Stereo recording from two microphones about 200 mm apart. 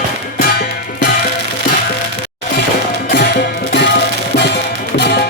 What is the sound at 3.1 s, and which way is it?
Music, 55° left (ahead or behind).